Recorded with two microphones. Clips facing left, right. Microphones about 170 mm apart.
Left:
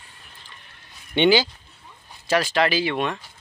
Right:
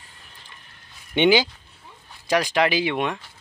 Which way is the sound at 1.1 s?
15° right (ahead or behind).